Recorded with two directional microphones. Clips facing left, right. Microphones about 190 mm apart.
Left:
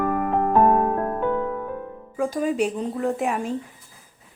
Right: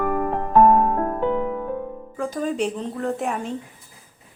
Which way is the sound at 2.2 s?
Centre (ahead or behind).